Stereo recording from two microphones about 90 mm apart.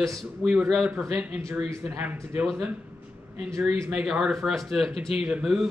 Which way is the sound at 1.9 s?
25° right (ahead or behind).